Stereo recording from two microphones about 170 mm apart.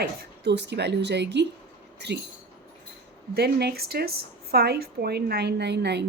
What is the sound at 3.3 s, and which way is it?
A woman's voice, 70° right (ahead or behind).